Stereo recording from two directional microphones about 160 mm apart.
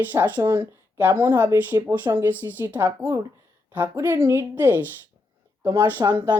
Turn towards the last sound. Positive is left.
turn(degrees=-10)  # may be behind; listen again after turning